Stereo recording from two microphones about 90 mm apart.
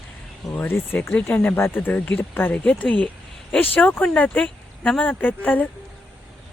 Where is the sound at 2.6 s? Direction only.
10° left (ahead or behind).